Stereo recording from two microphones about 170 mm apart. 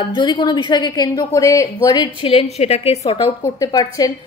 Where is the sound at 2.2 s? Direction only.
35° left (ahead or behind).